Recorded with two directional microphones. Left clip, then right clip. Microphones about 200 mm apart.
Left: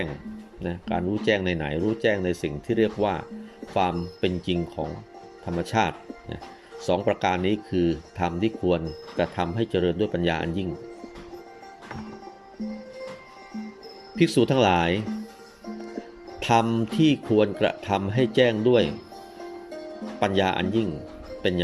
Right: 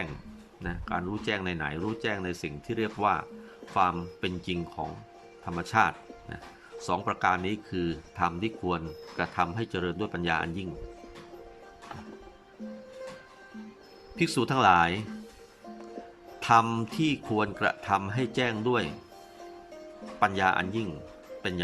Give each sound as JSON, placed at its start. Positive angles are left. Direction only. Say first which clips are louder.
{"t": 0.6, "sound": "speech", "louder": "left 5 dB", "side_deg": 0}
{"t": 14.2, "sound": "speech", "louder": "left 5 dB", "side_deg": -5}
{"t": 16.4, "sound": "speech", "louder": "left 1 dB", "side_deg": -5}
{"t": 20.1, "sound": "speech", "louder": "left 1 dB", "side_deg": -5}